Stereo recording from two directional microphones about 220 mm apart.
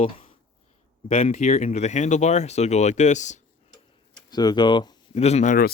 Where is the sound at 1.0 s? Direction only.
30° left (ahead or behind).